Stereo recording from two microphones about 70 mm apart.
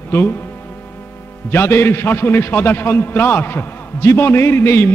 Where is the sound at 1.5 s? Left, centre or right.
Left.